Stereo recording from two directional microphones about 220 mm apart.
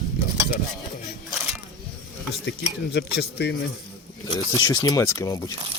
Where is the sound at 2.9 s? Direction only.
50° left (ahead or behind).